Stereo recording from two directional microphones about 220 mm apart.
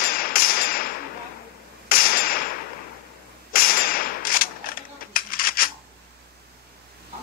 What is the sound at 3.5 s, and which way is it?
Cap gun, 40° left (ahead or behind).